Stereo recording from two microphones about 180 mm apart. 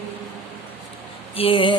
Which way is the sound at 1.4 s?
30° left (ahead or behind).